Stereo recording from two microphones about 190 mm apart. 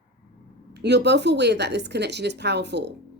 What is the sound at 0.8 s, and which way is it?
Speech, 65° right (ahead or behind).